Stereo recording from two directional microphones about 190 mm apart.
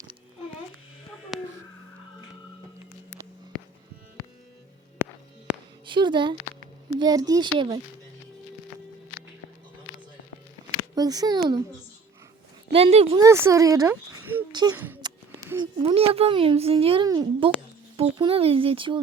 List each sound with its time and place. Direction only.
1.3 s a sound: centre (ahead or behind)
3.5 s cattle: 5° left (ahead or behind)
5.0 s music: 15° right (ahead or behind)
5.8 s a woman's voice: 25° right (ahead or behind)
10.9 s a woman's voice: 20° right (ahead or behind)
12.7 s speech: 30° right (ahead or behind)
13.1 s speech: 15° right (ahead or behind)
15.0 s a sound: 20° right (ahead or behind)
15.9 s a woman's voice: 30° right (ahead or behind)